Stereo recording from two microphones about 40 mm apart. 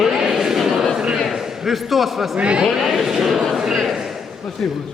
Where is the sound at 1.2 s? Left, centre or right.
Centre.